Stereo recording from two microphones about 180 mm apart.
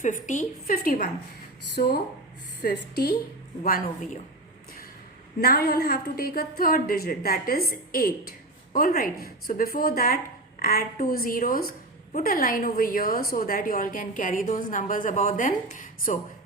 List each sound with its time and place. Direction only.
0.0 s a woman's voice: 45° left (ahead or behind); by 3.1 s 65° left (ahead or behind)
3.6 s a woman's voice: 50° left (ahead or behind)
5.4 s a woman's voice: 60° left (ahead or behind)